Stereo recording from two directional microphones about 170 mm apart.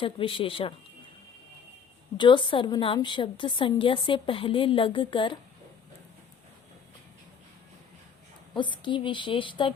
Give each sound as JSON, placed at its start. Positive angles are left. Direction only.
{"t": 0.0, "sound": "speech", "side_deg": 30}
{"t": 2.1, "sound": "a woman's voice", "side_deg": 30}
{"t": 8.5, "sound": "a woman's voice", "side_deg": 25}